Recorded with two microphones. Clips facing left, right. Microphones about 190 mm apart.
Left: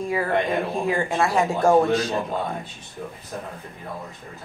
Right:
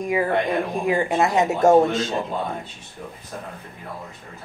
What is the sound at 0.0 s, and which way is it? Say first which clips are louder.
Speech: right 2 dB; 15° right (ahead or behind).